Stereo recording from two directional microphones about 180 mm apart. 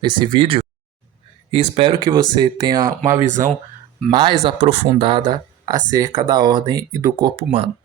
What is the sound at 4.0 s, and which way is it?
Speech, 30° right (ahead or behind).